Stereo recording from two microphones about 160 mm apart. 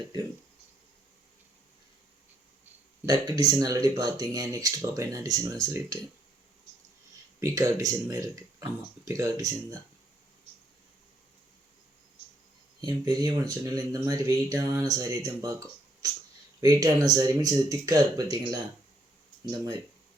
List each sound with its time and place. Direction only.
3.1 s speech: 25° right (ahead or behind)
7.3 s speech: 20° right (ahead or behind)
12.8 s speech: 25° right (ahead or behind)
16.6 s speech: 20° right (ahead or behind)